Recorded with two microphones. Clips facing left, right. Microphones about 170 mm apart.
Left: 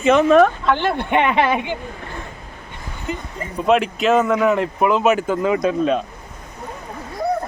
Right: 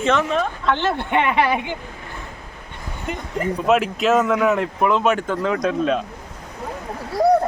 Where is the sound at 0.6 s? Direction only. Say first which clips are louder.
Left 2 dB; 10° left (ahead or behind).